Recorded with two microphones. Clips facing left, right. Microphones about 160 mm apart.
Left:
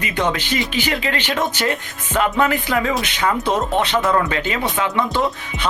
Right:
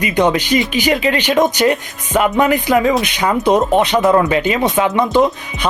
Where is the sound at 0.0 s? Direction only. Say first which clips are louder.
Right 7 dB; 15° right (ahead or behind).